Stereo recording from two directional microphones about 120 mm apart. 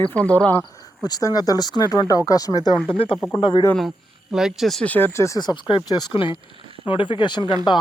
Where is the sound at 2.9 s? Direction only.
45° left (ahead or behind).